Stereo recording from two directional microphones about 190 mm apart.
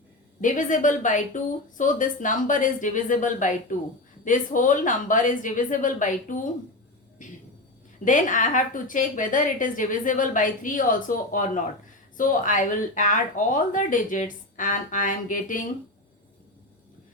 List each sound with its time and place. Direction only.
0.4 s a woman's voice: 40° left (ahead or behind)